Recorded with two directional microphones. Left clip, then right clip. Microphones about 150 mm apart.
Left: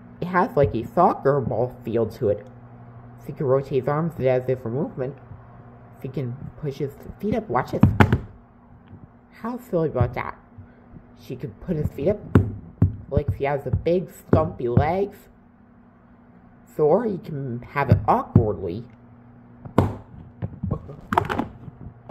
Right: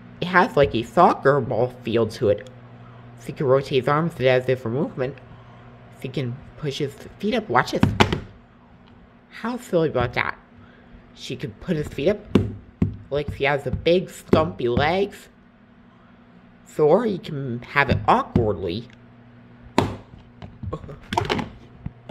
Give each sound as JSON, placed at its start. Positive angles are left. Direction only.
{"t": 0.2, "sound": "speech", "side_deg": -5}
{"t": 9.3, "sound": "speech", "side_deg": -5}
{"t": 16.7, "sound": "speech", "side_deg": -5}
{"t": 20.7, "sound": "a sound", "side_deg": -5}